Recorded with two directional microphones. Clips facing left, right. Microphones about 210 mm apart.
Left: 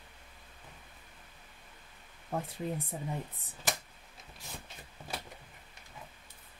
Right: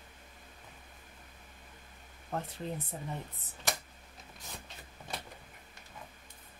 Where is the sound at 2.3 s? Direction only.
10° left (ahead or behind).